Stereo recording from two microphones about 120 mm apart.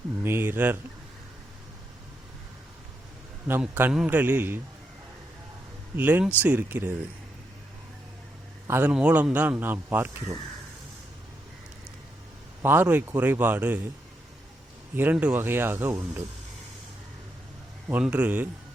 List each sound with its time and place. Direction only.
0.2 s speech: 20° right (ahead or behind)
3.6 s speech: 15° right (ahead or behind)
6.0 s speech: 15° right (ahead or behind)
8.6 s a man's voice: 20° right (ahead or behind)
8.9 s speech: 10° right (ahead or behind)
12.6 s speech: 15° right (ahead or behind)
14.9 s speech: 15° right (ahead or behind)
17.8 s speech: 10° right (ahead or behind)